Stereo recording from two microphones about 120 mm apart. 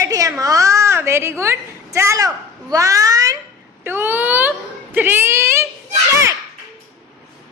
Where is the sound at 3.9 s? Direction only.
15° right (ahead or behind).